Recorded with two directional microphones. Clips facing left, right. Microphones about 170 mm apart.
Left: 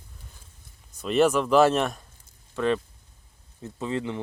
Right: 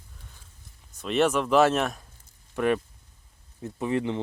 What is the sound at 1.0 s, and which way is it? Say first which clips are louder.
Speech: left 2 dB; centre (ahead or behind).